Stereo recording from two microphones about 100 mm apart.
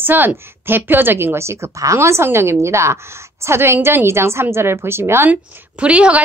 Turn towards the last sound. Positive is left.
turn(degrees=-10)  # may be behind; listen again after turning